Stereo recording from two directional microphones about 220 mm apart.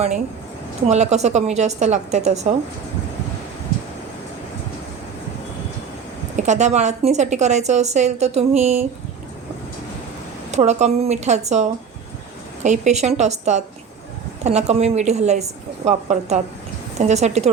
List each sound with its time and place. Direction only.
0.9 s a woman's voice: 30° right (ahead or behind)
6.3 s a woman's voice: 30° right (ahead or behind)
10.5 s a woman's voice: 30° right (ahead or behind)